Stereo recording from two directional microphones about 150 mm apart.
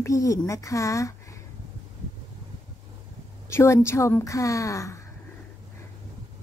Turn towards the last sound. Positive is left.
turn(degrees=20)  # may be behind; listen again after turning